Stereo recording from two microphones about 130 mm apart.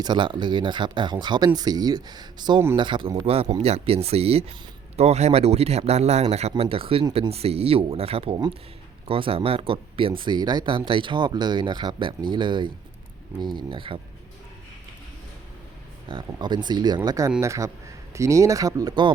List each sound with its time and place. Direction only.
0.0 s speech: 35° right (ahead or behind)
16.0 s speech: 35° right (ahead or behind)